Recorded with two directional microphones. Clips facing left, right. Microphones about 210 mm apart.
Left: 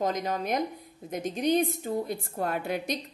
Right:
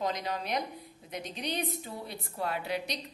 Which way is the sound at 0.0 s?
45° left (ahead or behind).